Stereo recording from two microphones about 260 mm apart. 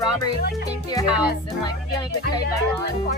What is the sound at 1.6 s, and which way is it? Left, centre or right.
Speech, centre.